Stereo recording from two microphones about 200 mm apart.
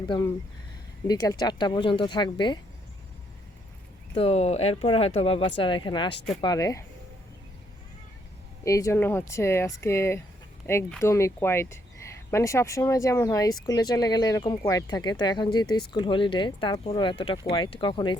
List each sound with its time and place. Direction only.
0.1 s speech: 25° left (ahead or behind)
4.1 s speech: 30° left (ahead or behind)
8.6 s speech: 15° left (ahead or behind)